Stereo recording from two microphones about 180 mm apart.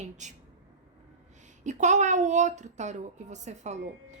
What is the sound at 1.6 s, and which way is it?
A woman's voice, 40° right (ahead or behind).